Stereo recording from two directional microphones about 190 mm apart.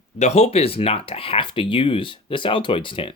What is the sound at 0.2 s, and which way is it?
Speech, 35° left (ahead or behind).